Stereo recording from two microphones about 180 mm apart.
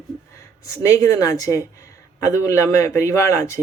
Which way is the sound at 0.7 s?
20° left (ahead or behind).